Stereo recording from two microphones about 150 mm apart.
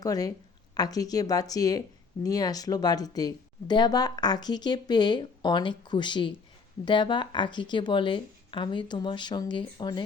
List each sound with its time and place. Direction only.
0.0 s a woman's voice: 25° left (ahead or behind)